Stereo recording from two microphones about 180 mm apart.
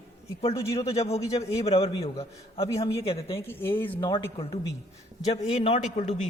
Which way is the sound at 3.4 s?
10° left (ahead or behind).